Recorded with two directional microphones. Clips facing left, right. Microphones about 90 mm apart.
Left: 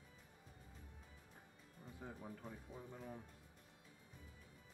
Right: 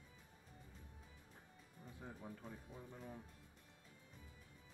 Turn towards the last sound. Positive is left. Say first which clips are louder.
# left 1 dB
turn(degrees=5)  # may be behind; listen again after turning